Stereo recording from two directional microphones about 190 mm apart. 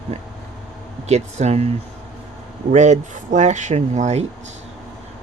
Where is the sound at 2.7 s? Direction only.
40° right (ahead or behind).